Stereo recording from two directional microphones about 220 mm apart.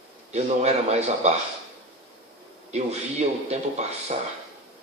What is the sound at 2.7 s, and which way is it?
Speech, 30° right (ahead or behind).